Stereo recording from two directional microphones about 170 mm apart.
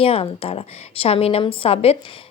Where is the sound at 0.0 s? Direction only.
35° left (ahead or behind).